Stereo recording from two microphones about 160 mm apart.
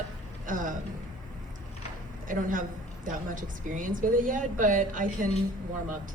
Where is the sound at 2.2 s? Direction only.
55° right (ahead or behind).